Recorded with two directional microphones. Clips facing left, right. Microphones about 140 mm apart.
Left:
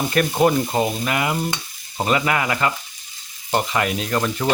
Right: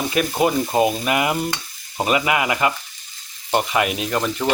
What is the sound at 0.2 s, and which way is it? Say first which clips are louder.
Speech: left 1 dB; 5° right (ahead or behind).